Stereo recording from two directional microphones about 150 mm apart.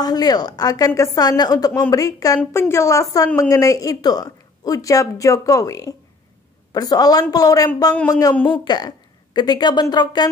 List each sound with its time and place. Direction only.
0.0 s a woman's voice: 25° left (ahead or behind)